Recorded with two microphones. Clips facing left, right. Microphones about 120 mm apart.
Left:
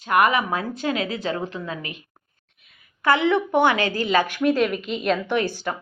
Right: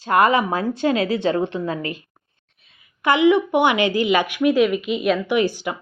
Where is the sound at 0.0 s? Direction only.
30° right (ahead or behind).